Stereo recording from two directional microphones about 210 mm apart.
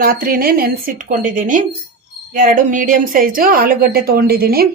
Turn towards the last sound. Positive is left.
turn(degrees=-45)  # may be behind; listen again after turning